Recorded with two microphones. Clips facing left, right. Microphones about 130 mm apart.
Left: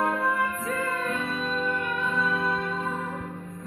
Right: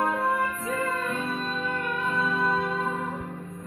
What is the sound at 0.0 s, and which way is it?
Music, centre (ahead or behind).